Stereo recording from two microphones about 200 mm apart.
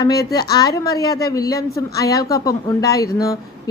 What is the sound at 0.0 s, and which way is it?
A woman's voice, 20° left (ahead or behind).